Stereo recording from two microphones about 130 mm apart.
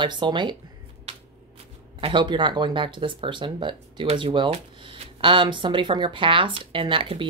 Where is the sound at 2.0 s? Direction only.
40° right (ahead or behind).